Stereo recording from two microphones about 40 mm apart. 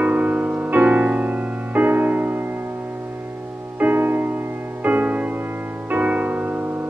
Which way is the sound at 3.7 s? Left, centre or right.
Right.